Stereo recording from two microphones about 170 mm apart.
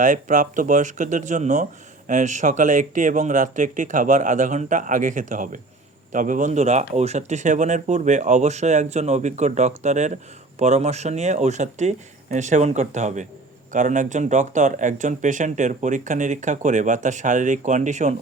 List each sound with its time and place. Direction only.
0.0 s speech: 50° right (ahead or behind)